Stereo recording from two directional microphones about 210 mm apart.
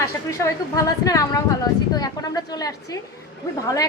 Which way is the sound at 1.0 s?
15° left (ahead or behind).